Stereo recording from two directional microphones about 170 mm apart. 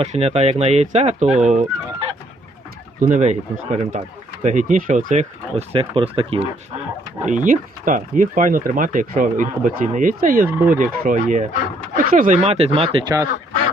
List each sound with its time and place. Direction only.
0.0 s speech: 35° right (ahead or behind)
1.5 s fowl: 40° right (ahead or behind)
3.0 s speech: 45° right (ahead or behind)
7.3 s speech: 50° right (ahead or behind); by 13.1 s 30° right (ahead or behind)